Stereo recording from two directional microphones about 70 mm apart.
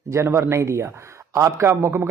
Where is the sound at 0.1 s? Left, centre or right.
Right.